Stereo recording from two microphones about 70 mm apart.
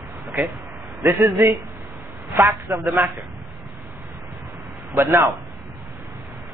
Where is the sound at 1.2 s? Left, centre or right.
Right.